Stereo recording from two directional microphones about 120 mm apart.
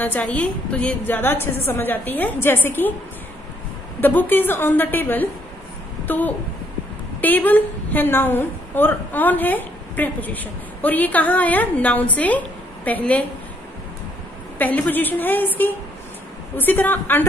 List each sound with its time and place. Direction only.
0.2 s a woman's voice: 10° left (ahead or behind)
4.0 s a woman's voice: 15° left (ahead or behind)
14.6 s a woman's voice: 15° left (ahead or behind)
16.5 s a woman's voice: 15° left (ahead or behind)